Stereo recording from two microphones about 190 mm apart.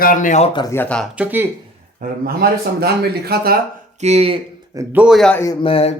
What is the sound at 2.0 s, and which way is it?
A man's voice, 55° right (ahead or behind).